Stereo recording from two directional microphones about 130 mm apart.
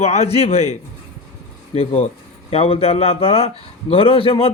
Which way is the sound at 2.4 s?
50° left (ahead or behind).